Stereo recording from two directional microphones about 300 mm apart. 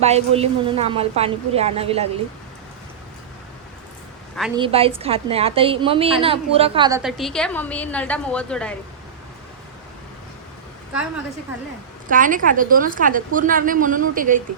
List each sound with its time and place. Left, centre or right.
0.0 s a woman's voice: right
4.5 s a woman's voice: centre
7.0 s a woman's voice: centre
12.0 s a woman's voice: right